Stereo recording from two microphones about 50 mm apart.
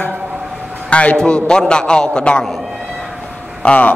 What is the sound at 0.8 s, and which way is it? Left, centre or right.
A man's voice, left.